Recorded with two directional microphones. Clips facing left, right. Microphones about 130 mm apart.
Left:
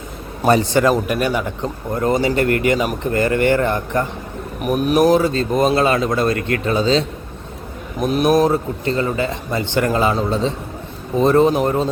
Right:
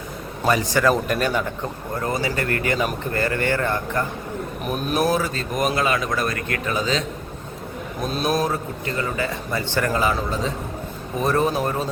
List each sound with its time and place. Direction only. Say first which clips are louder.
0.4 s a man's voice: left 6 dB; 35° left (ahead or behind)
0.9 s a man's voice: left 3 dB; 10° left (ahead or behind)
2.0 s speech: left 8 dB; 25° left (ahead or behind)
8.0 s a man's voice: left 8 dB; 15° left (ahead or behind)